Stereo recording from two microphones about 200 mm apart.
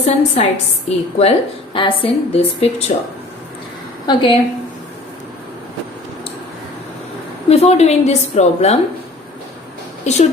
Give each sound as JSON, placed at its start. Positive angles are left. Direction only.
{"t": 0.0, "sound": "a woman's voice", "side_deg": 35}
{"t": 4.0, "sound": "a woman's voice", "side_deg": 20}
{"t": 7.5, "sound": "a woman's voice", "side_deg": 30}
{"t": 10.0, "sound": "speech", "side_deg": 35}